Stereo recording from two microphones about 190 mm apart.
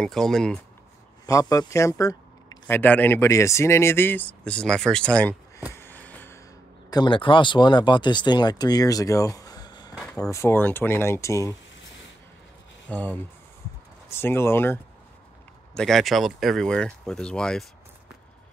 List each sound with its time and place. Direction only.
0.0 s speech: centre (ahead or behind)
1.2 s speech: 15° left (ahead or behind)
5.8 s a sound: 10° left (ahead or behind)
6.9 s speech: 25° left (ahead or behind)
9.9 s a sound: 5° left (ahead or behind)
10.3 s speech: 15° left (ahead or behind)
12.8 s speech: 5° left (ahead or behind)